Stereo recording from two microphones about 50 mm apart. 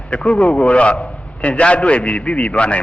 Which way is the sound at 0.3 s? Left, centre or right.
Left.